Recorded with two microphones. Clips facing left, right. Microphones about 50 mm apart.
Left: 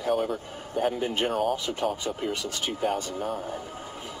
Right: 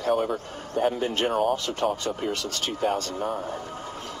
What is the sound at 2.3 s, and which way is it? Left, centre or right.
Speech, centre.